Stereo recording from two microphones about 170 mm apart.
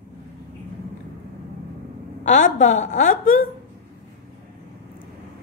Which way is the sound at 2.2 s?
45° left (ahead or behind).